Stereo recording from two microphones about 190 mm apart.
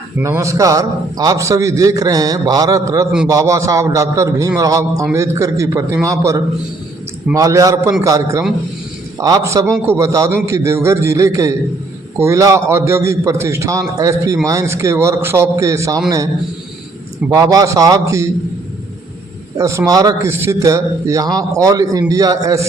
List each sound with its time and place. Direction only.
0.2 s a man's voice: 15° right (ahead or behind)
19.5 s a man's voice: 15° right (ahead or behind)